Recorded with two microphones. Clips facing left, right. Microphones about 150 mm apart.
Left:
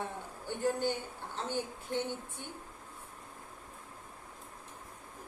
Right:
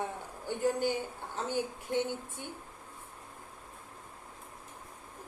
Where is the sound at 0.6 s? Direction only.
10° right (ahead or behind).